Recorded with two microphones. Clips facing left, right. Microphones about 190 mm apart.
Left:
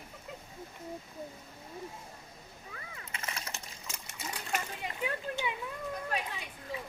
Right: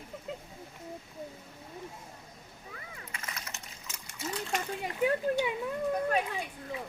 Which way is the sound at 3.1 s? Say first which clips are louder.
Left 3 dB; 25° left (ahead or behind).